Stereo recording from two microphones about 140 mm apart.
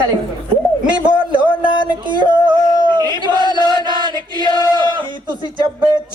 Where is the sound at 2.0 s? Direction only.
35° right (ahead or behind).